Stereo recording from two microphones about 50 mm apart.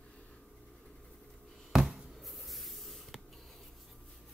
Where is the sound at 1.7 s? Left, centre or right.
Centre.